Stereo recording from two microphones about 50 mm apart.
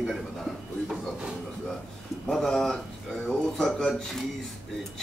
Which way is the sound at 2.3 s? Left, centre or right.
Centre.